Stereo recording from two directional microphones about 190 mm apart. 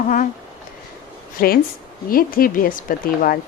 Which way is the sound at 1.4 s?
50° left (ahead or behind).